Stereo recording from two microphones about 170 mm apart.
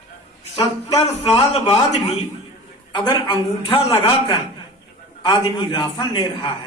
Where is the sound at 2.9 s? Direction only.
25° left (ahead or behind).